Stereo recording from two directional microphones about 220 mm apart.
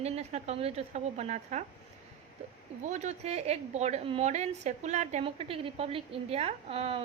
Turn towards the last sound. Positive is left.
turn(degrees=-25)  # may be behind; listen again after turning